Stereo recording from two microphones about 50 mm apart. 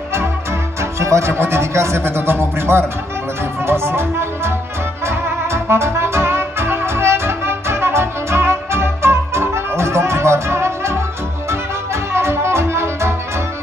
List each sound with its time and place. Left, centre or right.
0.9 s music: right
1.3 s speech: right
1.7 s speech: right
3.6 s music: right